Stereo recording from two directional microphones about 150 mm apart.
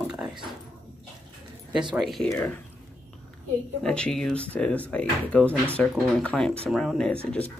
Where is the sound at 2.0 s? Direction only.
Centre (ahead or behind).